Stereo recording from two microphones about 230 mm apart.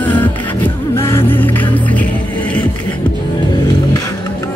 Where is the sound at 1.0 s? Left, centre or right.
Centre.